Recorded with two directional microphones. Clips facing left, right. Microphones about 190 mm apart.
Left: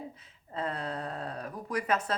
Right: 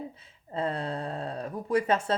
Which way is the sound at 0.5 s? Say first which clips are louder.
Right 4 dB; 30° right (ahead or behind).